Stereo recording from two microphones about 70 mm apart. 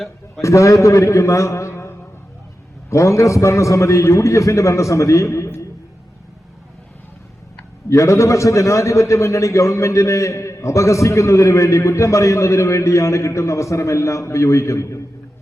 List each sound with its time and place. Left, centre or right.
0.4 s a man's voice: left
7.9 s a man's voice: left